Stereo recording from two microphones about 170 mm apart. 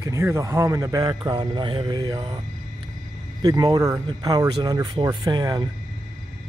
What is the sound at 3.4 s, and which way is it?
Speech, 20° right (ahead or behind).